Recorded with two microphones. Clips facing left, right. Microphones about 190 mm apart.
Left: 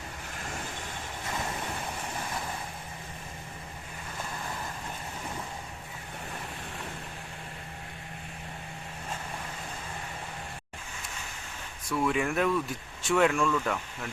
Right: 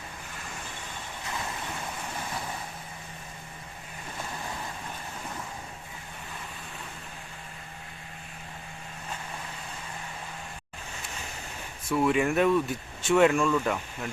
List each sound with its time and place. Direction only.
11.9 s speech: 5° right (ahead or behind)